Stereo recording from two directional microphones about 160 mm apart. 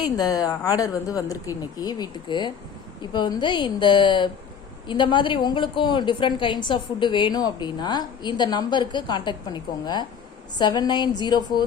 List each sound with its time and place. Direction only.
0.0 s a woman's voice: 25° left (ahead or behind)